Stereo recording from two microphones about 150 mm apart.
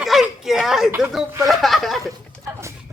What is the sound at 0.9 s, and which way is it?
Speech, 10° right (ahead or behind).